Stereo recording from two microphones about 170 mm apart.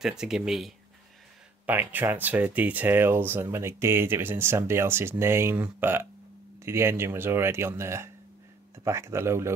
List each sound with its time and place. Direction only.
0.0 s speech: 5° right (ahead or behind)